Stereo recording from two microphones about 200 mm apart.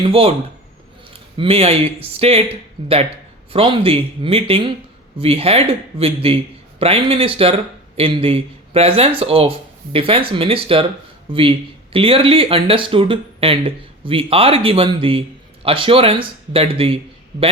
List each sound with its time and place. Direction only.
0.0 s a man's voice: 30° right (ahead or behind)
1.4 s a man's voice: 30° right (ahead or behind)
3.5 s a man's voice: 25° right (ahead or behind)